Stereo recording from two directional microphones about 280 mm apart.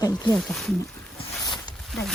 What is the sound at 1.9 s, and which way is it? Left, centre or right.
Speech, centre.